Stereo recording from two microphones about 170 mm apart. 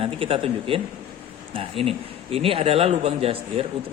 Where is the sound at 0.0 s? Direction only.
35° right (ahead or behind).